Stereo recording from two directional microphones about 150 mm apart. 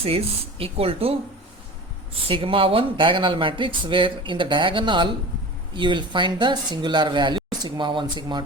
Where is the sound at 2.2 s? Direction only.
35° right (ahead or behind).